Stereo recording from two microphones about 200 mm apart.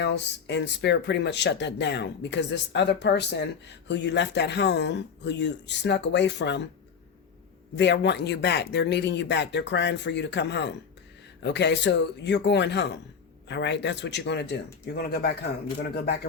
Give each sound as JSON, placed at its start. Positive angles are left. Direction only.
{"t": 0.0, "sound": "speech", "side_deg": 60}
{"t": 7.8, "sound": "speech", "side_deg": 60}